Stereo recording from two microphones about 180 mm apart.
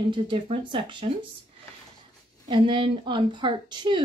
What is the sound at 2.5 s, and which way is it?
Speech, 25° right (ahead or behind).